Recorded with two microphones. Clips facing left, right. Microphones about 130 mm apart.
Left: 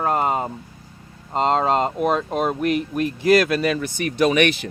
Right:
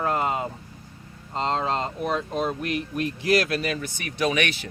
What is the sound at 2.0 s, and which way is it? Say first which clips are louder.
Speech: left 5 dB; 65° left (ahead or behind).